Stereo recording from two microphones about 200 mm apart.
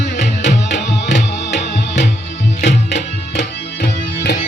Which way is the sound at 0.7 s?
60° left (ahead or behind).